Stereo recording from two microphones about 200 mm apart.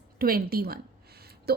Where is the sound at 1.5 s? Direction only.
50° right (ahead or behind).